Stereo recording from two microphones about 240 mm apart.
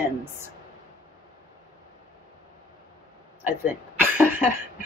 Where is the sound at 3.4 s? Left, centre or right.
Centre.